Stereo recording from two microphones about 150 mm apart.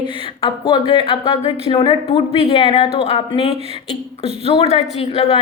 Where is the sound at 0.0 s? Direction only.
35° left (ahead or behind).